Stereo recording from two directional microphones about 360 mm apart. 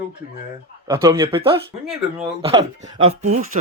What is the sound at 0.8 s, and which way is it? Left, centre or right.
Speech, centre.